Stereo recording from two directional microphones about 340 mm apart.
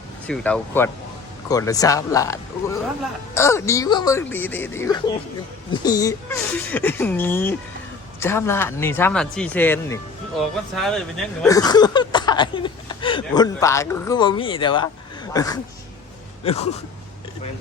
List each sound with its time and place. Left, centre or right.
0.3 s speech: centre